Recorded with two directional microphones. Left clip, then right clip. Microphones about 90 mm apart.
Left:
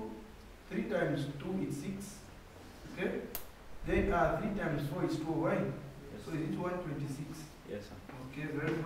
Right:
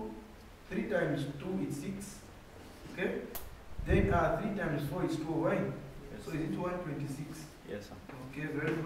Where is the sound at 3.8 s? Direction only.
Centre (ahead or behind).